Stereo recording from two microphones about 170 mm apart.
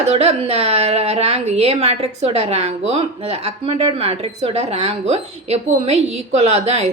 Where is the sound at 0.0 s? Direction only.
35° right (ahead or behind).